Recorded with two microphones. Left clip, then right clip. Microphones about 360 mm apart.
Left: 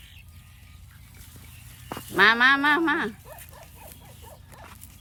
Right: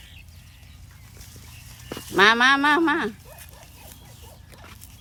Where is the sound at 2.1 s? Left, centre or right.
Centre.